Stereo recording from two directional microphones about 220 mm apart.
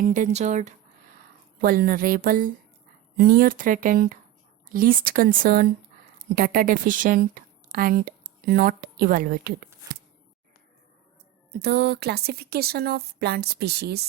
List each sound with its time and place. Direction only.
0.0 s speech: 35° right (ahead or behind)
1.6 s a woman's voice: 45° right (ahead or behind)
11.6 s a woman's voice: 45° right (ahead or behind)